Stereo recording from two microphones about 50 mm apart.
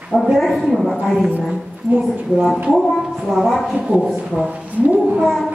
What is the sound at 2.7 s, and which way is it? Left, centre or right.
Speech, centre.